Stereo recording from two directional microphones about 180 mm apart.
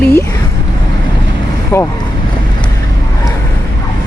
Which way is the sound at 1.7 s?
10° left (ahead or behind).